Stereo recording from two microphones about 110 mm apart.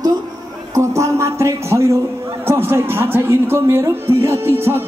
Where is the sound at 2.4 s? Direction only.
20° right (ahead or behind).